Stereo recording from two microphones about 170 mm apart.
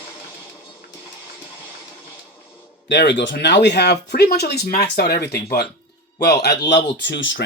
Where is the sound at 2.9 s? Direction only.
85° left.